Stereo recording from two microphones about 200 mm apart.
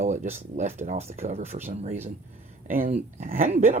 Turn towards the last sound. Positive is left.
turn(degrees=-35)  # may be behind; listen again after turning